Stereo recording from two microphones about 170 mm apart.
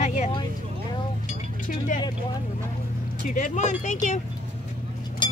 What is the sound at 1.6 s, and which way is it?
Speech, 50° left (ahead or behind).